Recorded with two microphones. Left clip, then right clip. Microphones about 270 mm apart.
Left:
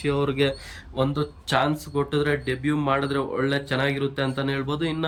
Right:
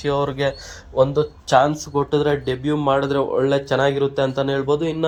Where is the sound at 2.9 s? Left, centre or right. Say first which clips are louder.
Right 7 dB; centre.